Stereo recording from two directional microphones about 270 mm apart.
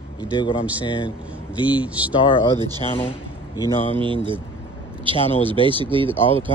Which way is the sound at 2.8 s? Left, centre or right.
Centre.